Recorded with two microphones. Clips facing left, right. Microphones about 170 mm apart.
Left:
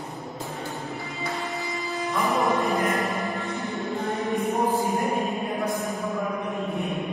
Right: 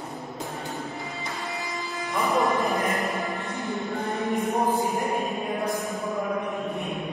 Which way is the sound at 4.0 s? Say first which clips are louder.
Left 1 dB; centre (ahead or behind).